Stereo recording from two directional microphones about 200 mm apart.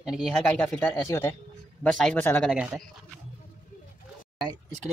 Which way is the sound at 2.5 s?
5° right (ahead or behind).